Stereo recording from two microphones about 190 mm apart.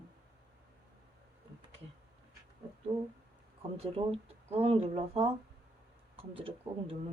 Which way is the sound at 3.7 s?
30° right (ahead or behind).